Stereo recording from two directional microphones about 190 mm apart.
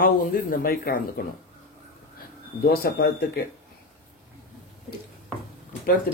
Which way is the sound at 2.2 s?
50° left (ahead or behind).